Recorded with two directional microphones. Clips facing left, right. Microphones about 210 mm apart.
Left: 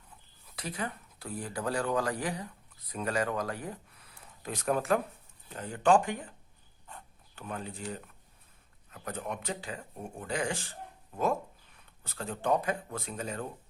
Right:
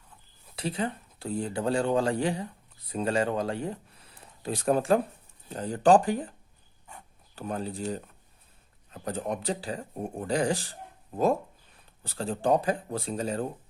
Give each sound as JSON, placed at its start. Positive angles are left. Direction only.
{"t": 0.5, "sound": "speech", "side_deg": -30}
{"t": 7.3, "sound": "speech", "side_deg": -35}